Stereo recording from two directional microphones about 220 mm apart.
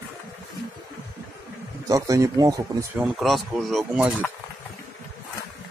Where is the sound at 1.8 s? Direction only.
15° right (ahead or behind); by 4.3 s centre (ahead or behind).